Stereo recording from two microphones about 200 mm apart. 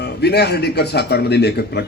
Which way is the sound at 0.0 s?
55° left (ahead or behind).